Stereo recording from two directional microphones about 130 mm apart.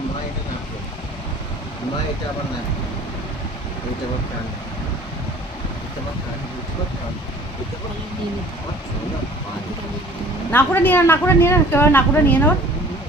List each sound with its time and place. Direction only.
10.5 s speech: 15° left (ahead or behind)